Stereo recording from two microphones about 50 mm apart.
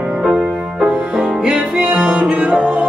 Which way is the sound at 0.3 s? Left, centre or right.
Right.